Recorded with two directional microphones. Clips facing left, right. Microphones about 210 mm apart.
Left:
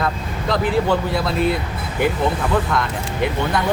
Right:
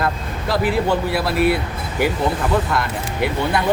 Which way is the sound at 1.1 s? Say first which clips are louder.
Right 2 dB; 5° right (ahead or behind).